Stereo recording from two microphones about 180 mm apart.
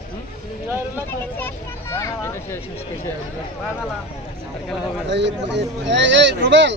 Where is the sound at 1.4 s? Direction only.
15° left (ahead or behind).